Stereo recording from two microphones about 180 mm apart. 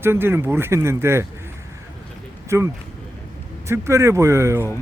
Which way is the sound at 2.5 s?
15° right (ahead or behind).